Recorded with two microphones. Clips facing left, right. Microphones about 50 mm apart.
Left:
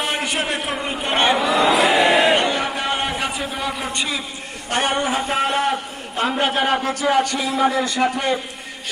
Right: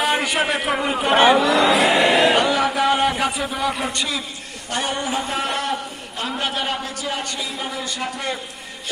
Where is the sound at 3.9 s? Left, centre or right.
Centre.